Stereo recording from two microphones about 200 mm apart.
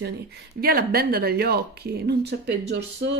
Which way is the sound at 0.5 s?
50° right (ahead or behind).